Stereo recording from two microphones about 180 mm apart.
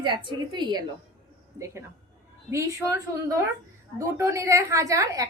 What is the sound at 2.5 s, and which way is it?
A woman's voice, 15° right (ahead or behind).